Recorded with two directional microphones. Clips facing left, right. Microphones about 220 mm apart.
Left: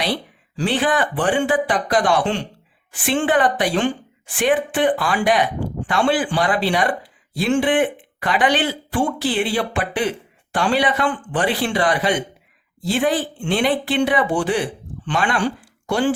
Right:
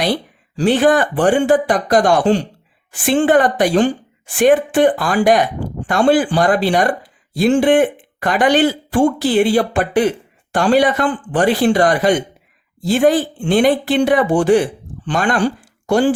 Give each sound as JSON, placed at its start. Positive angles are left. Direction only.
{"t": 0.0, "sound": "speech", "side_deg": -45}